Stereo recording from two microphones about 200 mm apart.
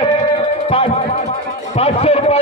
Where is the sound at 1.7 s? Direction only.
30° left (ahead or behind).